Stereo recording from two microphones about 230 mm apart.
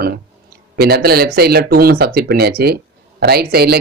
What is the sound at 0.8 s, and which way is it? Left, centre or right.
Speech, right.